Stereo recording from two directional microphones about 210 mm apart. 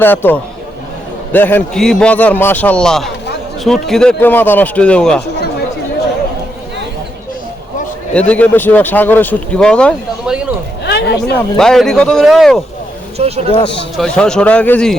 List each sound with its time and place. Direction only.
0.0 s a man's voice: 10° left (ahead or behind)
8.1 s speech: 5° left (ahead or behind)
10.8 s a sound: 50° left (ahead or behind)
11.5 s a man's voice: centre (ahead or behind)
13.1 s speech: 30° right (ahead or behind)
13.9 s a man's voice: 5° left (ahead or behind)